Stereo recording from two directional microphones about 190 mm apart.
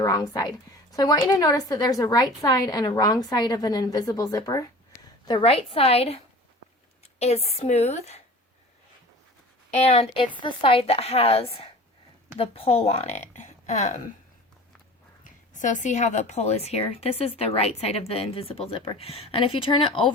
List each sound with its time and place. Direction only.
0.0 s a woman's voice: 20° left (ahead or behind)
9.7 s a woman's voice: 35° left (ahead or behind)
15.2 s a woman's voice: 40° left (ahead or behind); by 20.1 s 25° left (ahead or behind)